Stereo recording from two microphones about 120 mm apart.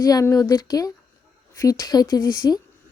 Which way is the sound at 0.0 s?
30° left (ahead or behind).